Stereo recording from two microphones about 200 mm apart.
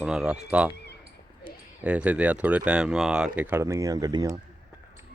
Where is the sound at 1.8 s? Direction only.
5° right (ahead or behind).